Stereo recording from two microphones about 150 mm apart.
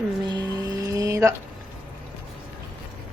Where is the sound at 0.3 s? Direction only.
25° right (ahead or behind).